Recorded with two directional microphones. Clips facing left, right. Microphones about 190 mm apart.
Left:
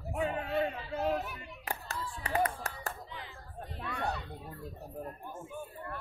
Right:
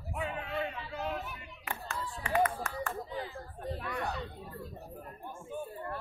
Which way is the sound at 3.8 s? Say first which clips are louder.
Left 3 dB; 30° left (ahead or behind).